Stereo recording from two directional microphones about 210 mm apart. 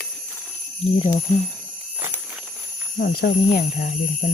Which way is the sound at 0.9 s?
25° left (ahead or behind).